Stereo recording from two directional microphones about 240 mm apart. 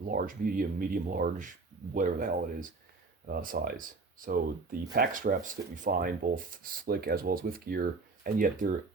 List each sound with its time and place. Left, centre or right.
0.1 s speech: right